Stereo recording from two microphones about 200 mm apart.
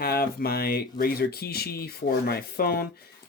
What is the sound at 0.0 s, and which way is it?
Speech, 50° left (ahead or behind).